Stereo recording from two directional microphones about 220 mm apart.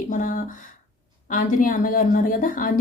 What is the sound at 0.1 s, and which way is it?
A woman's voice, 35° left (ahead or behind).